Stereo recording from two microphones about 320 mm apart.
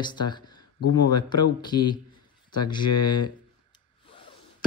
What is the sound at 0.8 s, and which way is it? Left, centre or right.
Speech, left.